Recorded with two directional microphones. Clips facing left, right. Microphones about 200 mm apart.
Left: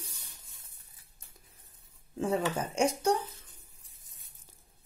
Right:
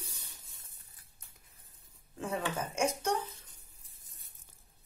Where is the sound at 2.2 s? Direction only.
30° left (ahead or behind).